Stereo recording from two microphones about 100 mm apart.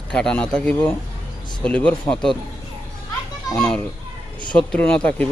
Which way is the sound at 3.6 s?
10° left (ahead or behind).